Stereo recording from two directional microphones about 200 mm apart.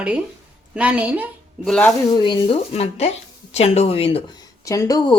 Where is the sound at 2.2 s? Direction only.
25° left (ahead or behind).